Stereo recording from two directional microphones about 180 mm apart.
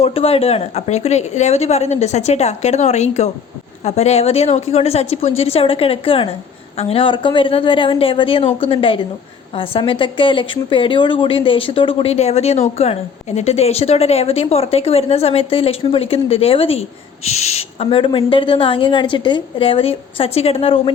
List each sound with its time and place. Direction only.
0.0 s a woman's voice: 30° left (ahead or behind)